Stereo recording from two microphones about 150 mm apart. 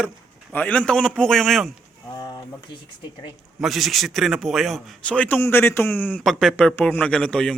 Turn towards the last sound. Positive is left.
turn(degrees=5)  # may be behind; listen again after turning